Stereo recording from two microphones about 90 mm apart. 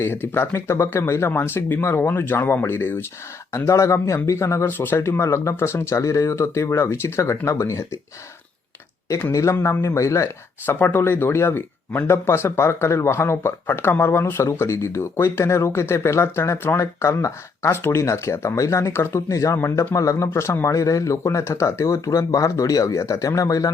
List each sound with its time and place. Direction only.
0.0 s speech: 25° left (ahead or behind)
9.3 s speech: 35° left (ahead or behind)
10.7 s speech: 25° left (ahead or behind)